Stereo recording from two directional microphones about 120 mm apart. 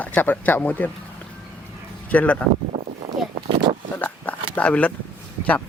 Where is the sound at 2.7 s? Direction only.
60° right (ahead or behind).